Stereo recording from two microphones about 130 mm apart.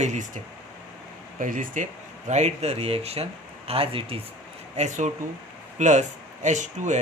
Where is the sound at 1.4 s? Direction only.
90° right; by 4.2 s 45° right (ahead or behind).